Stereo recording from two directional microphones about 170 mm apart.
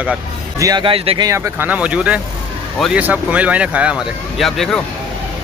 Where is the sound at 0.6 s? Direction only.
25° right (ahead or behind).